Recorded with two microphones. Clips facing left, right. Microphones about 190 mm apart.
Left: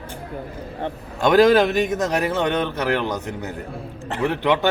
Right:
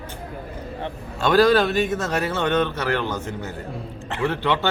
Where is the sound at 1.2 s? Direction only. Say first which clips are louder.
Left 2 dB; 20° left (ahead or behind).